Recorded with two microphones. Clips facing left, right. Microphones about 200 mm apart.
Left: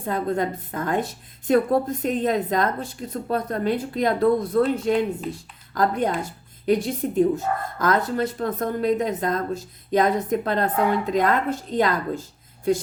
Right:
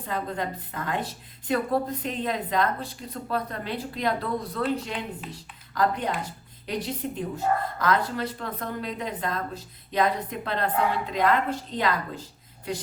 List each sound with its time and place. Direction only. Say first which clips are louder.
0.0 s a woman's voice: left 6 dB; 45° left (ahead or behind)